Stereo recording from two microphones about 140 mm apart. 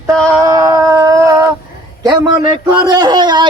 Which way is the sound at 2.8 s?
30° right (ahead or behind).